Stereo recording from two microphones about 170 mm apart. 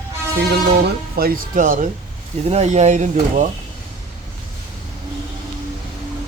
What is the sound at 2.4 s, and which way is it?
Speech, 40° right (ahead or behind).